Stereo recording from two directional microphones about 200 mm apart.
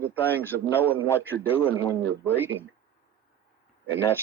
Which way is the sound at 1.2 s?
10° right (ahead or behind).